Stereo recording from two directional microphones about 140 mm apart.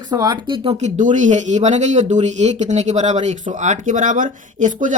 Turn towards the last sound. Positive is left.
turn(degrees=-65)  # may be behind; listen again after turning